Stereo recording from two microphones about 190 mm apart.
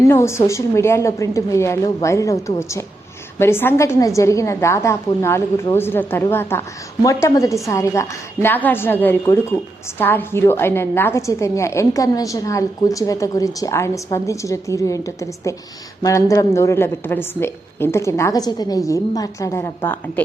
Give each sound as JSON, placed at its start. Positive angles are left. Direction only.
{"t": 0.1, "sound": "a woman's voice", "side_deg": 15}